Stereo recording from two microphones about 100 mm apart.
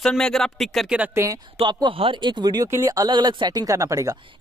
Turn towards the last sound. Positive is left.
turn(degrees=-35)  # may be behind; listen again after turning